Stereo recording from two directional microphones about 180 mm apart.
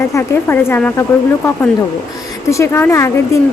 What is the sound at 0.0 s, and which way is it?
Speech, 15° left (ahead or behind).